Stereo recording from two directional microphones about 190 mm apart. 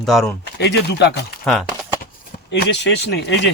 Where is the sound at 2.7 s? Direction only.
65° left (ahead or behind).